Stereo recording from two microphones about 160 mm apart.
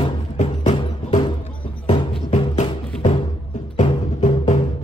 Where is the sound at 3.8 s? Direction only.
45° left (ahead or behind).